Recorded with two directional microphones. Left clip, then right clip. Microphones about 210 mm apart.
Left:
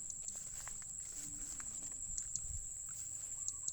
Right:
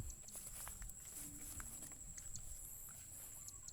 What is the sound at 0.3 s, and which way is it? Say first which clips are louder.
Walk: left 7 dB; 15° right (ahead or behind).